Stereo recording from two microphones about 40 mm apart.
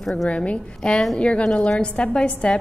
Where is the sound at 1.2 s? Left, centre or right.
Left.